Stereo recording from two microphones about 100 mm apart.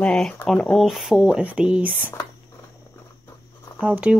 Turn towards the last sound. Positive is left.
turn(degrees=-15)  # may be behind; listen again after turning